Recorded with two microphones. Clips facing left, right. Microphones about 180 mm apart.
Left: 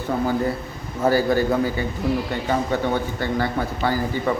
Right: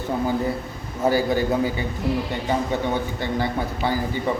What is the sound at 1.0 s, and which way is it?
Speech, 15° right (ahead or behind).